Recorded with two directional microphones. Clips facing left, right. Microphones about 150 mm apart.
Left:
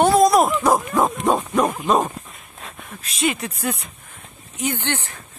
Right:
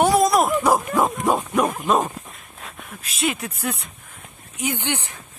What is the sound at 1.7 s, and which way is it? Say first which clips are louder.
Dog: left 1 dB; centre (ahead or behind).